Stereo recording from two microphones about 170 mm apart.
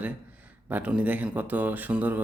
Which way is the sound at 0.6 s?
10° right (ahead or behind).